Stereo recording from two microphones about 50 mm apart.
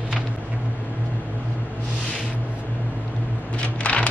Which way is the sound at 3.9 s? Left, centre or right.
Left.